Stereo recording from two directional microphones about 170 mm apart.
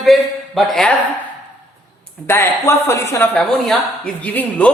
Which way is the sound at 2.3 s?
15° left (ahead or behind).